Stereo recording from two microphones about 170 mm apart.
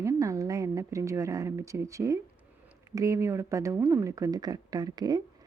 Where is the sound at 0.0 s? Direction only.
20° right (ahead or behind).